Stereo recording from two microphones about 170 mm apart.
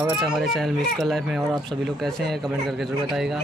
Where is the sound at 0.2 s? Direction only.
Centre (ahead or behind).